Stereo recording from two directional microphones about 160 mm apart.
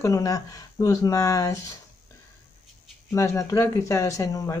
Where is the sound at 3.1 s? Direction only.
20° left (ahead or behind).